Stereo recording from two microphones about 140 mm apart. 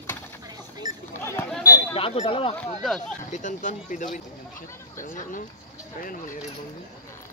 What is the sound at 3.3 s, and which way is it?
Speech, 60° left (ahead or behind).